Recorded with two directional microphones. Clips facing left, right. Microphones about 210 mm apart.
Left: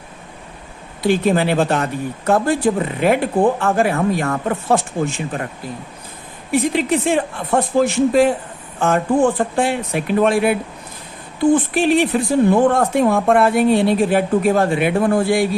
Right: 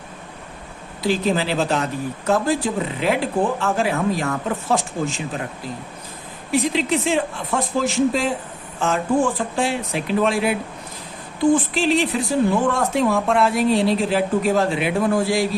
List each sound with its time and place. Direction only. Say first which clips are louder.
1.0 s speech: left 4 dB; 55° left (ahead or behind)
6.5 s speech: left 3 dB; 55° left (ahead or behind)
11.5 s speech: left 4 dB; 55° left (ahead or behind)